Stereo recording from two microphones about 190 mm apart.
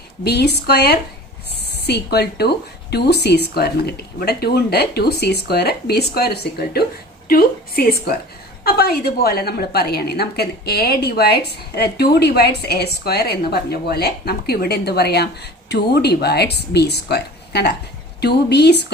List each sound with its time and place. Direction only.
0.3 s a woman's voice: 60° left (ahead or behind)